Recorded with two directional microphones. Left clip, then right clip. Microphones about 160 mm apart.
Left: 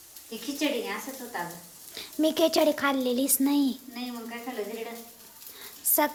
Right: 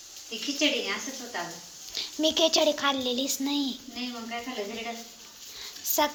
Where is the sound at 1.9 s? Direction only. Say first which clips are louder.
Even; 25° left (ahead or behind).